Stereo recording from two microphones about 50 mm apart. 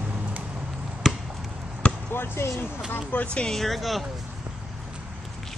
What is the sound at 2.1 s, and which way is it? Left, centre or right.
Speech, left.